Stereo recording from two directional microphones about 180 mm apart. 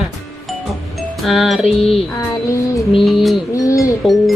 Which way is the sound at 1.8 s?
35° left (ahead or behind).